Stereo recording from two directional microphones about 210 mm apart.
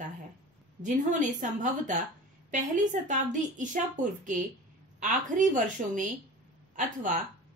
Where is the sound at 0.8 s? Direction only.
35° right (ahead or behind).